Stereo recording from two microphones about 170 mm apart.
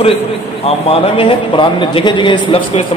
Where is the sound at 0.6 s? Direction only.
35° left (ahead or behind).